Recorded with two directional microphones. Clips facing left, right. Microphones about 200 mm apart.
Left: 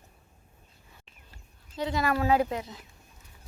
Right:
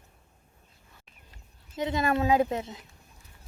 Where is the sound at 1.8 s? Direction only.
20° right (ahead or behind).